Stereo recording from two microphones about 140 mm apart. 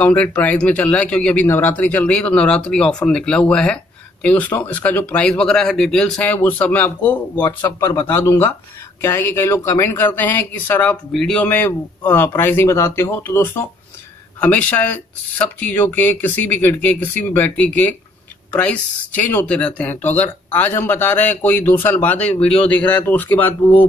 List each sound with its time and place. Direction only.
0.0 s speech: 10° left (ahead or behind)